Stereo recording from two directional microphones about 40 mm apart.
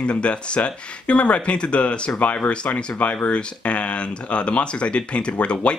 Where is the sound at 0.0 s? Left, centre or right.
Left.